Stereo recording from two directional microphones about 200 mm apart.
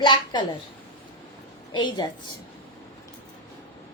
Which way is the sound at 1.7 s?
20° left (ahead or behind).